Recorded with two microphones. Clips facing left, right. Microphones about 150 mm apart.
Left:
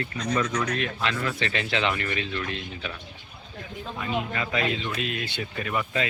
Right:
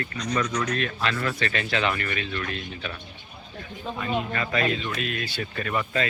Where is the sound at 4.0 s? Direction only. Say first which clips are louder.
Right 1 dB; 10° left (ahead or behind).